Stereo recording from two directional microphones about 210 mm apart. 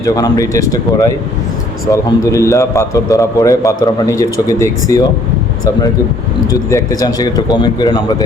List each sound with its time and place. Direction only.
0.0 s a man's voice: 15° left (ahead or behind)
6.5 s speech: 15° left (ahead or behind)